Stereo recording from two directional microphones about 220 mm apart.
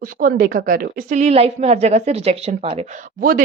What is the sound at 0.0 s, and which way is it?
A woman's voice, 40° right (ahead or behind).